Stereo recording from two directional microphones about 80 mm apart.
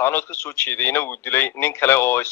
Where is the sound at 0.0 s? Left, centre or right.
Left.